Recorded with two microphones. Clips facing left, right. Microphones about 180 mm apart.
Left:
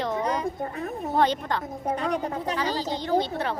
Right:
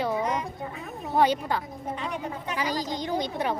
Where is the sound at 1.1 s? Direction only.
10° right (ahead or behind).